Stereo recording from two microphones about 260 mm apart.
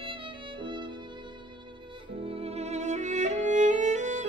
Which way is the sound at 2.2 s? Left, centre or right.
Right.